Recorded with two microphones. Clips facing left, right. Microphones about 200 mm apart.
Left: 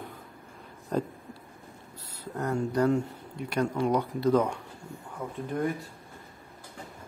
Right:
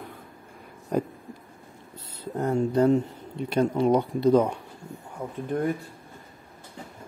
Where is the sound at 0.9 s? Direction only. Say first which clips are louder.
Right 3 dB; 10° right (ahead or behind).